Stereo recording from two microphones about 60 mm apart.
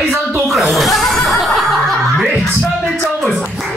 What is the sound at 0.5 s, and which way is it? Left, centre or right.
Snicker, centre.